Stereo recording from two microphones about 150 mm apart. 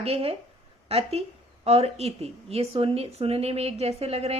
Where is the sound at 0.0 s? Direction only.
40° right (ahead or behind).